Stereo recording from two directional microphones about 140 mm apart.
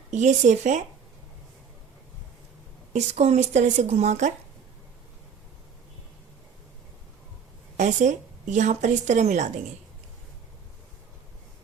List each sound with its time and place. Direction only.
0.1 s a woman's voice: 55° right (ahead or behind)
2.9 s a woman's voice: 55° right (ahead or behind)
7.8 s a woman's voice: 60° right (ahead or behind)